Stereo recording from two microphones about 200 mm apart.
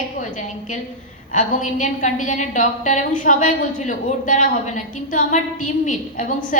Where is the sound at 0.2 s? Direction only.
40° left (ahead or behind).